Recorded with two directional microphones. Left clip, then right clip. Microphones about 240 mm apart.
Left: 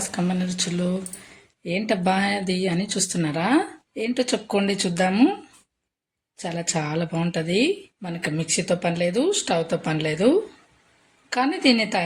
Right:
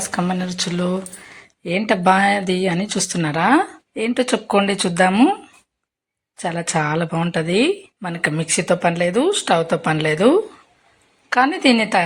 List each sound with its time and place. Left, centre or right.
0.1 s speech: centre
6.4 s speech: centre